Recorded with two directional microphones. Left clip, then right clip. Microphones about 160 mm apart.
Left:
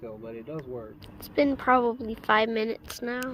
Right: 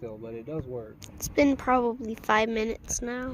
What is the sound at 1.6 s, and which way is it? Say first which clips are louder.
A woman's voice: left 2 dB; 5° right (ahead or behind).